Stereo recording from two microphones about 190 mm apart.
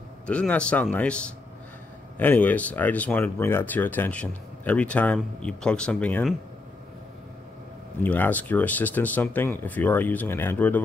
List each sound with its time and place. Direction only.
0.3 s speech: 5° left (ahead or behind)
8.0 s speech: 10° left (ahead or behind)